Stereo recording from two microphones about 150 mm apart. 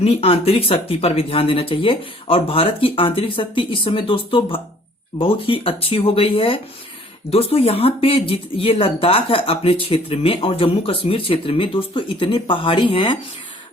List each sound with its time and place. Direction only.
0.0 s speech: 40° left (ahead or behind)